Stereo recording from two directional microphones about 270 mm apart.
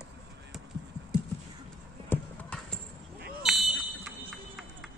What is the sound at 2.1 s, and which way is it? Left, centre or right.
Clip-clop, centre.